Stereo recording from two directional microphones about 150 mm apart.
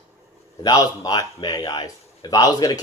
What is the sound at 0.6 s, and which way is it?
A man's voice, 25° left (ahead or behind).